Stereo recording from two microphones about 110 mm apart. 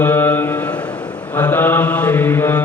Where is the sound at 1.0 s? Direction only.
40° left (ahead or behind).